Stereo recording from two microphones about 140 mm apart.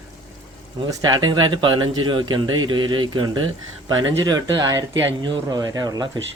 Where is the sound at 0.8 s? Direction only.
25° right (ahead or behind).